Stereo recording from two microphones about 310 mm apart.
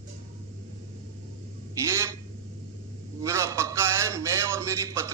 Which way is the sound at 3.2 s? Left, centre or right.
Centre.